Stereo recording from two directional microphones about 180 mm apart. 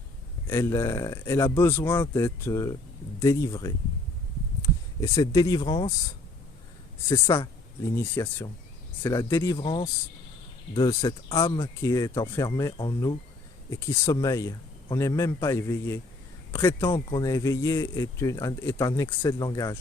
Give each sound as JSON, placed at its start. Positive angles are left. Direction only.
{"t": 0.4, "sound": "speech", "side_deg": 15}
{"t": 7.1, "sound": "speech", "side_deg": 15}